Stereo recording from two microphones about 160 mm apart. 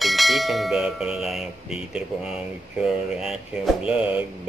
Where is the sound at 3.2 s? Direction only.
5° right (ahead or behind).